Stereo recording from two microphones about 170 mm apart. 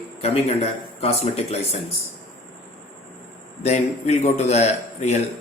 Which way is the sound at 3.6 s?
40° left (ahead or behind).